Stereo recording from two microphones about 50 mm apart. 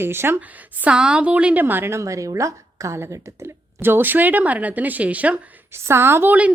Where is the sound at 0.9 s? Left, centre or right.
Centre.